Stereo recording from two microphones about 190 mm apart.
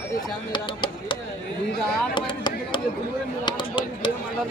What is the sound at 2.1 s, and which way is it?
Chop, 25° left (ahead or behind).